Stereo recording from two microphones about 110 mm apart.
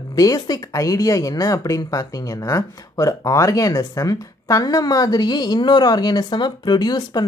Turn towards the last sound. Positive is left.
turn(degrees=40)  # may be behind; listen again after turning